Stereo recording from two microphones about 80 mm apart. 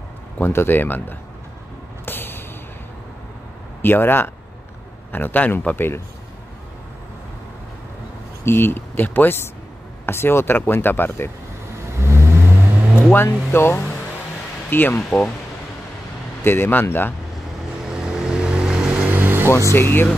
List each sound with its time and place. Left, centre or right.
0.4 s speech: left
2.0 s a sound: left
3.8 s speech: left
8.5 s speech: left
12.0 s vehicle: right
13.1 s speech: left
15.0 s speech: centre
16.4 s speech: left
17.8 s vehicle: centre; by 19.5 s right
19.7 s speech: left